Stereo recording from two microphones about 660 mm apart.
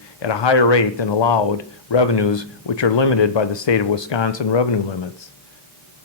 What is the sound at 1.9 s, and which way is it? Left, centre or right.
Speech, left.